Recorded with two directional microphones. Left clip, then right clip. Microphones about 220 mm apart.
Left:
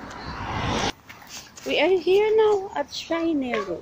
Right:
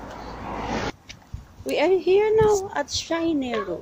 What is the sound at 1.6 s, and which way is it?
A woman's voice, 5° right (ahead or behind).